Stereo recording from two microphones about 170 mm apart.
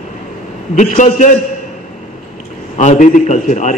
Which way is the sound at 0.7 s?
45° left (ahead or behind).